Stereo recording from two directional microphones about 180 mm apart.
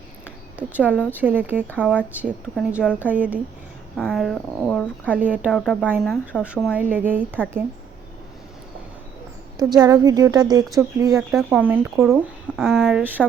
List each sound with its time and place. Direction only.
0.5 s speech: 10° right (ahead or behind)
9.6 s a woman's voice: 20° right (ahead or behind)
11.3 s speech: 5° right (ahead or behind)